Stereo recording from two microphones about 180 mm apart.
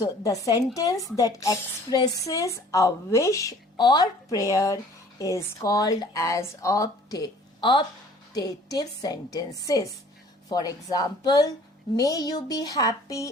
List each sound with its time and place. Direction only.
0.0 s a woman's voice: 20° left (ahead or behind)